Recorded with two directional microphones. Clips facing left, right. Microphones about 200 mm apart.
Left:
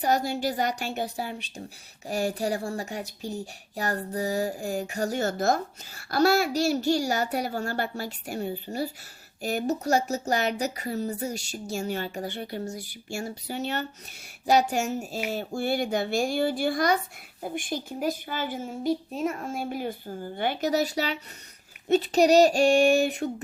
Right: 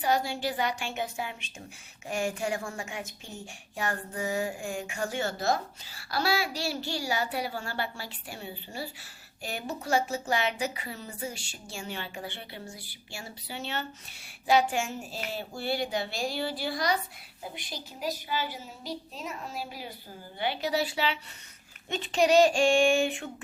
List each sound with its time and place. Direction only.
0.0 s a child's voice: 40° left (ahead or behind)